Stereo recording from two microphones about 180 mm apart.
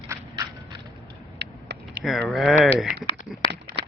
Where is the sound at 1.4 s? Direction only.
65° right (ahead or behind).